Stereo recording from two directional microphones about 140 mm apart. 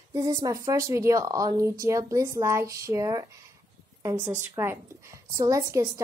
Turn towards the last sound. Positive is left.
turn(degrees=-20)  # may be behind; listen again after turning